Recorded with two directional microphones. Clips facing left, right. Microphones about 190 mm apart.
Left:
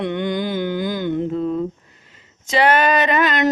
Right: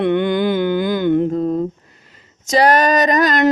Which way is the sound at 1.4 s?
40° right (ahead or behind).